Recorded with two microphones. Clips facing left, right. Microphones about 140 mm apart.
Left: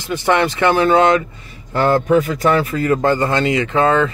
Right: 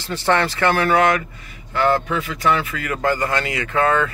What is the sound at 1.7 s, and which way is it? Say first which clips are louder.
Speech: left 5 dB; 35° left (ahead or behind).